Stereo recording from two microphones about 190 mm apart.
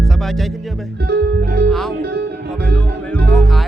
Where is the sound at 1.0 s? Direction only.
60° right (ahead or behind).